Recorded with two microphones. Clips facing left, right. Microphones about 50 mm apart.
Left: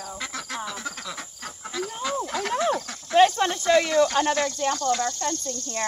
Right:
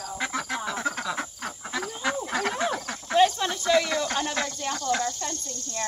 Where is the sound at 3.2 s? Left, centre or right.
Left.